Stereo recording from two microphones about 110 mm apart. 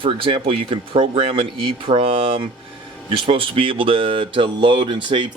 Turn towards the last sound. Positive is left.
turn(degrees=-45)  # may be behind; listen again after turning